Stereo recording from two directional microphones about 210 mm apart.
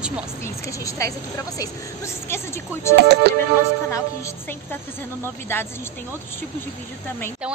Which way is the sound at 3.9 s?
15° left (ahead or behind).